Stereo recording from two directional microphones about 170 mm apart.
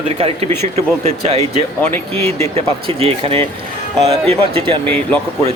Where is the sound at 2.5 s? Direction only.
35° right (ahead or behind).